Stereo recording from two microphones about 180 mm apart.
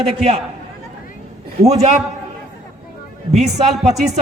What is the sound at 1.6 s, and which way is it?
Speech, 35° right (ahead or behind).